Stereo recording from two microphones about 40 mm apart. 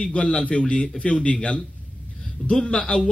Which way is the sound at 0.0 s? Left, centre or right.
Left.